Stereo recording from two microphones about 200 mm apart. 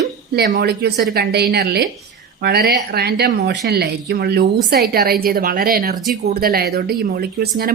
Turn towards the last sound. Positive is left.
turn(degrees=-50)  # may be behind; listen again after turning